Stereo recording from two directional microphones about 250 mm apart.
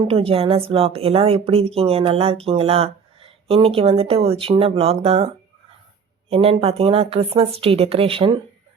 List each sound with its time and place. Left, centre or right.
0.1 s a woman's voice: right
6.3 s a woman's voice: right